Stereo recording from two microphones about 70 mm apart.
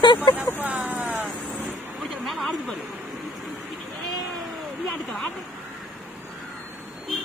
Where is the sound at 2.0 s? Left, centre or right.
Centre.